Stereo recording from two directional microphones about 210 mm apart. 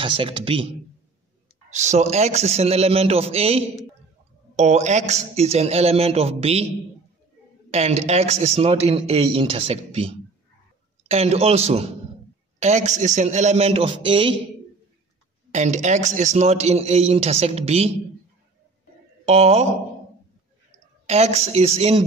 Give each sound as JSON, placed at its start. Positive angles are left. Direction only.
{"t": 0.0, "sound": "a man's voice", "side_deg": -25}
{"t": 1.7, "sound": "a man's voice", "side_deg": -35}
{"t": 7.7, "sound": "a man's voice", "side_deg": -30}
{"t": 15.5, "sound": "a man's voice", "side_deg": -35}
{"t": 19.2, "sound": "a man's voice", "side_deg": -30}
{"t": 21.1, "sound": "a man's voice", "side_deg": -30}